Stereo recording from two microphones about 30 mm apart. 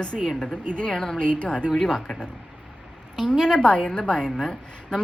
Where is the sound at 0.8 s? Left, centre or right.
Left.